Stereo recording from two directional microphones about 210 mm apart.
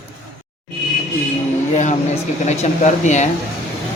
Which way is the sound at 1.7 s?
35° left (ahead or behind).